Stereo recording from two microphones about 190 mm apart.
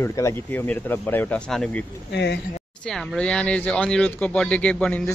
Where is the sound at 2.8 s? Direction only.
Centre (ahead or behind).